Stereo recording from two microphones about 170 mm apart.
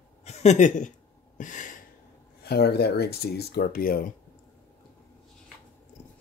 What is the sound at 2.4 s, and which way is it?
Speech, 70° left (ahead or behind).